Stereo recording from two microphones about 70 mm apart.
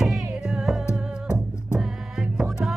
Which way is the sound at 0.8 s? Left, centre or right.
Left.